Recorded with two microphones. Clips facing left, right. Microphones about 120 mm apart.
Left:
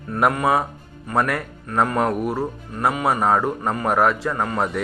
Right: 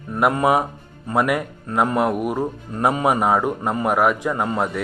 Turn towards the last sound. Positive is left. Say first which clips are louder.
# right 1 dB
turn(degrees=-15)  # may be behind; listen again after turning